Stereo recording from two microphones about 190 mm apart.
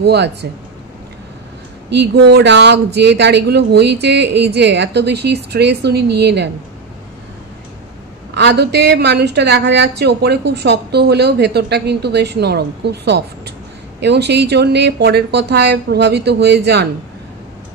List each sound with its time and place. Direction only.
0.0 s a woman's voice: 60° right (ahead or behind)
1.9 s a woman's voice: 60° right (ahead or behind)
8.4 s a woman's voice: 60° right (ahead or behind)